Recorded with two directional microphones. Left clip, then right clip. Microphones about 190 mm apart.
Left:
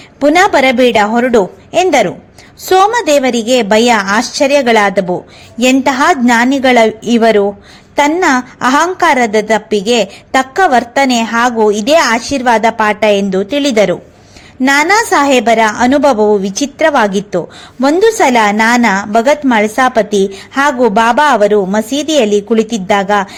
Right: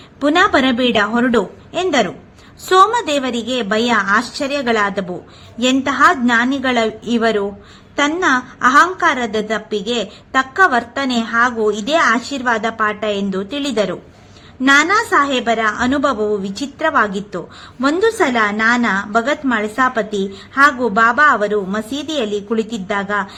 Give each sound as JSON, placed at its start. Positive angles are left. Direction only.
{"t": 0.2, "sound": "a woman's voice", "side_deg": 20}